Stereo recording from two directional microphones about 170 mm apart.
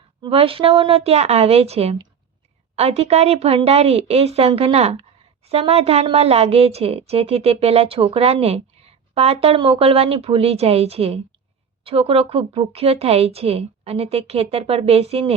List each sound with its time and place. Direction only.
0.2 s a woman's voice: 35° right (ahead or behind)